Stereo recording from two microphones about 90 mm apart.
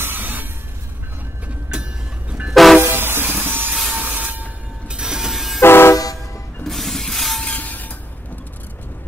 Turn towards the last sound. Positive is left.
turn(degrees=15)  # may be behind; listen again after turning